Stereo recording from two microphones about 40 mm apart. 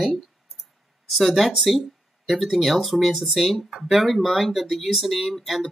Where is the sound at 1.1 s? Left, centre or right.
Centre.